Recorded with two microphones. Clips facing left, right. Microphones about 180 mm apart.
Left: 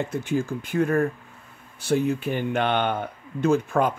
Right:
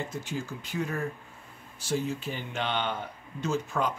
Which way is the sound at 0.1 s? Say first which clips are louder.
Left 10 dB; 55° left (ahead or behind).